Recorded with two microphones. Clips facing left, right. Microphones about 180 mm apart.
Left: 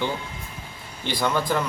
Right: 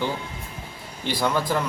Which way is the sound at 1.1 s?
5° right (ahead or behind).